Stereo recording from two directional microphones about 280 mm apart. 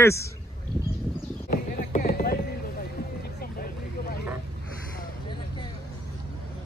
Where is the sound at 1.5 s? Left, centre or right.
Left.